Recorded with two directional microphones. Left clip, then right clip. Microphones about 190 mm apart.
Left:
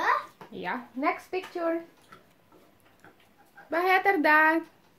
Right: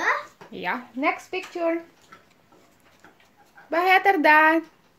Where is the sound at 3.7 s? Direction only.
15° right (ahead or behind).